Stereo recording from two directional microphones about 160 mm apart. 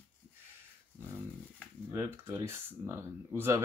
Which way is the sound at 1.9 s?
15° right (ahead or behind).